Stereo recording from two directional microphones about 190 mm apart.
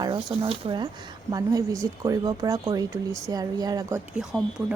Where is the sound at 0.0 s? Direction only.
20° right (ahead or behind).